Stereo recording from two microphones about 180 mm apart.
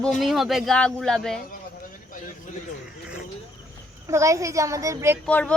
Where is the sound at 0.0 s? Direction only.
Centre (ahead or behind).